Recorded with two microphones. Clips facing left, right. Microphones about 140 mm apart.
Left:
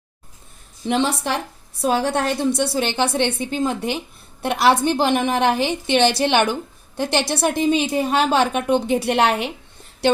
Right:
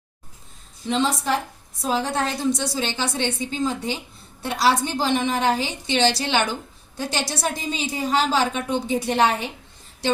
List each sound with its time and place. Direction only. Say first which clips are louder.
0.9 s a woman's voice: left 2 dB; 65° left (ahead or behind)